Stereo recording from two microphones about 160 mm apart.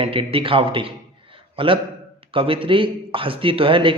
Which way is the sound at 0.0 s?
35° right (ahead or behind).